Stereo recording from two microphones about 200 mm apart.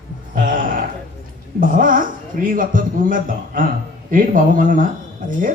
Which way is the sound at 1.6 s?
45° right (ahead or behind).